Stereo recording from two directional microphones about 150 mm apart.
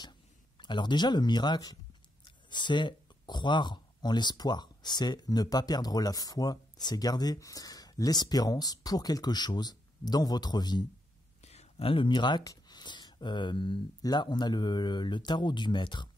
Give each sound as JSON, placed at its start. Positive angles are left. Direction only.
{"t": 0.6, "sound": "speech", "side_deg": 30}
{"t": 11.4, "sound": "speech", "side_deg": 45}